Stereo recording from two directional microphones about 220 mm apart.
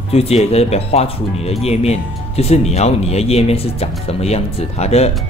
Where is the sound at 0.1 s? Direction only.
30° left (ahead or behind).